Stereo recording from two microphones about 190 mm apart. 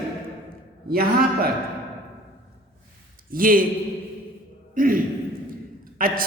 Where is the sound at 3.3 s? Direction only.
50° right (ahead or behind).